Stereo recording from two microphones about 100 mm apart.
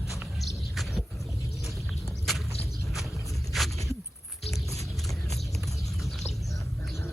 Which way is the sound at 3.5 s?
Centre (ahead or behind).